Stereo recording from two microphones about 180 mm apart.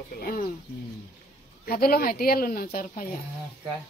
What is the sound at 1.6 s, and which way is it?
Speech, 55° left (ahead or behind).